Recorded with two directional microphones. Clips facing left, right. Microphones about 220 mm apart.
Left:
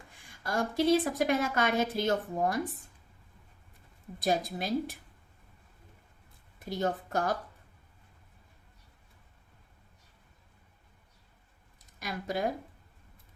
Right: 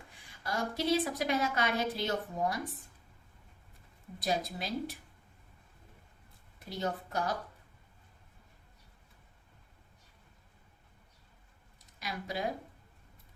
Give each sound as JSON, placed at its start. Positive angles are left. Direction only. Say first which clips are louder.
{"t": 0.4, "sound": "speech", "louder": "left 5 dB", "side_deg": 50}
{"t": 4.2, "sound": "speech", "louder": "left 4 dB", "side_deg": 50}
{"t": 6.7, "sound": "speech", "louder": "left 4 dB", "side_deg": 50}
{"t": 11.9, "sound": "speech", "louder": "left 4 dB", "side_deg": 50}